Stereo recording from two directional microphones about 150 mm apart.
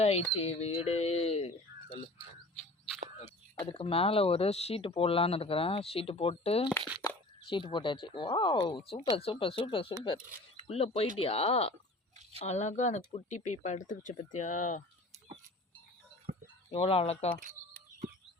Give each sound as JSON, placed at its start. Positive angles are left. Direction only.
{"t": 0.0, "sound": "speech", "side_deg": 45}
{"t": 2.6, "sound": "a sound", "side_deg": 0}
{"t": 3.7, "sound": "speech", "side_deg": 40}
{"t": 16.3, "sound": "a sound", "side_deg": -55}
{"t": 16.7, "sound": "speech", "side_deg": 40}
{"t": 17.4, "sound": "chicken", "side_deg": -60}